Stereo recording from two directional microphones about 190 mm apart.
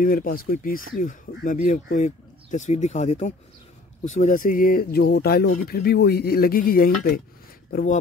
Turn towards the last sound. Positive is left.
turn(degrees=45)  # may be behind; listen again after turning